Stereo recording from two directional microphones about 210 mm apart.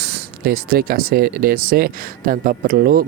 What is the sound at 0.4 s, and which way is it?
Speech, 45° right (ahead or behind).